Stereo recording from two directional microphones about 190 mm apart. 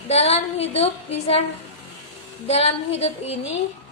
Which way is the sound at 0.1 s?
35° left (ahead or behind).